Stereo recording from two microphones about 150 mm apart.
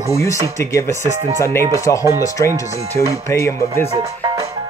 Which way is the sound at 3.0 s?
15° left (ahead or behind).